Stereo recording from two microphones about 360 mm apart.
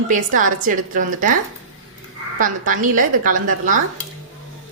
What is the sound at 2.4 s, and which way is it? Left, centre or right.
A woman's voice, right.